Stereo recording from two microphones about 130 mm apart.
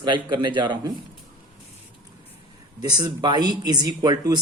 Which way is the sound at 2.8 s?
35° right (ahead or behind).